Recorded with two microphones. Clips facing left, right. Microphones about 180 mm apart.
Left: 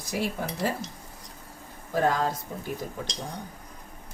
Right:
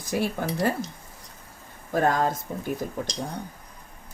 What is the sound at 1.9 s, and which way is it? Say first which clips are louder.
Speech: right 2 dB; 50° right (ahead or behind).